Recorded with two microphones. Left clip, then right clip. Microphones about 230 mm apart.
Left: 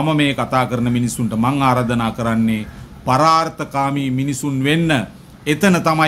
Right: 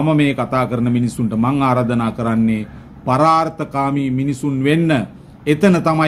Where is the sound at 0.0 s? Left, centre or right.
Centre.